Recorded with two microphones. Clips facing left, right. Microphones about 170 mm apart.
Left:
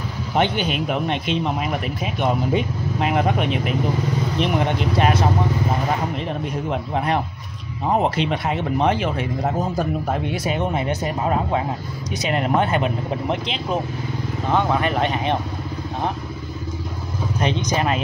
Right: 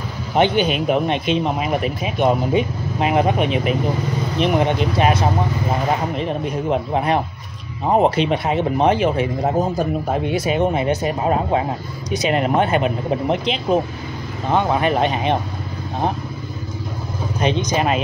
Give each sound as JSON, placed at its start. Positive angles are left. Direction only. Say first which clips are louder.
{"t": 0.4, "sound": "speech", "louder": "right 4 dB", "side_deg": -20}
{"t": 6.7, "sound": "speech", "louder": "right 4 dB", "side_deg": -20}
{"t": 10.3, "sound": "speech", "louder": "right 4 dB", "side_deg": -20}
{"t": 17.4, "sound": "speech", "louder": "right 3 dB", "side_deg": -20}